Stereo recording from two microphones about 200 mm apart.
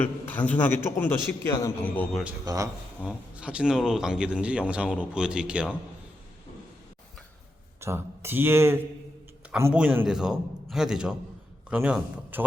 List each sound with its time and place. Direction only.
0.3 s a man's voice: 10° left (ahead or behind)
2.4 s speech: 20° right (ahead or behind)
3.0 s speech: 5° right (ahead or behind)
7.8 s speech: 15° right (ahead or behind)